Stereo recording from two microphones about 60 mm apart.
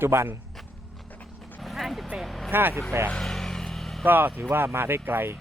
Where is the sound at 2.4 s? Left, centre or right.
Right.